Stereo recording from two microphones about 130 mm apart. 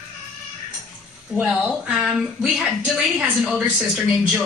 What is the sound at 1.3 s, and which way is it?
A woman's voice, 5° right (ahead or behind).